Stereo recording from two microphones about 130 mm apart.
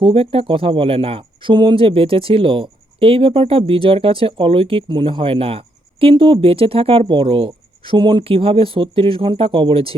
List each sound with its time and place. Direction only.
0.0 s speech: 45° right (ahead or behind)